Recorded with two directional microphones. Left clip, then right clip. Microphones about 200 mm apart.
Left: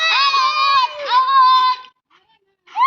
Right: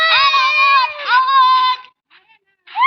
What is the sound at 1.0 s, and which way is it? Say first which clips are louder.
Goat: even; centre (ahead or behind).